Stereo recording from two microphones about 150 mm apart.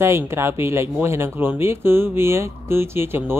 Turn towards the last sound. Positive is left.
turn(degrees=-15)  # may be behind; listen again after turning